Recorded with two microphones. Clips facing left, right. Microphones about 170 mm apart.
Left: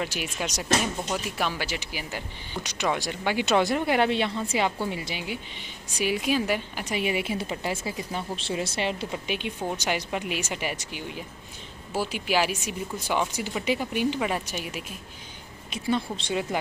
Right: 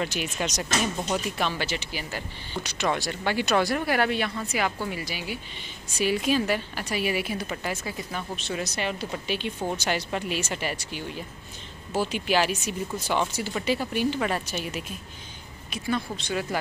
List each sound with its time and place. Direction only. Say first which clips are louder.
0.0 s a woman's voice: right 2 dB; 5° left (ahead or behind); by 9.0 s 25° left (ahead or behind)
9.1 s speech: right 1 dB; 15° left (ahead or behind)
15.7 s a woman's voice: left 2 dB; 25° left (ahead or behind)